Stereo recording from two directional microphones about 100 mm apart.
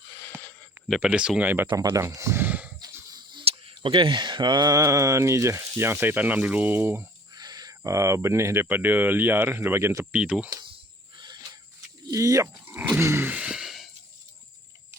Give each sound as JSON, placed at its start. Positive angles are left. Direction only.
{"t": 0.9, "sound": "speech", "side_deg": -10}
{"t": 1.9, "sound": "speech", "side_deg": -30}
{"t": 3.1, "sound": "a sound", "side_deg": -45}
{"t": 3.5, "sound": "speech", "side_deg": -55}
{"t": 7.3, "sound": "speech", "side_deg": -45}
{"t": 10.1, "sound": "speech", "side_deg": -10}
{"t": 10.5, "sound": "a sound", "side_deg": -50}
{"t": 11.2, "sound": "cricket", "side_deg": -45}
{"t": 12.1, "sound": "speech", "side_deg": -35}
{"t": 12.6, "sound": "grunt", "side_deg": -15}
{"t": 13.3, "sound": "sigh", "side_deg": -5}